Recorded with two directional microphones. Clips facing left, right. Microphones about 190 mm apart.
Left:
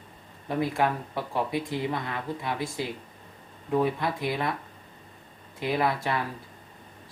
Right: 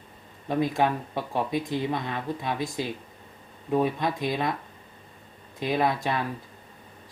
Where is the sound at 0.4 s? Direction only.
20° right (ahead or behind).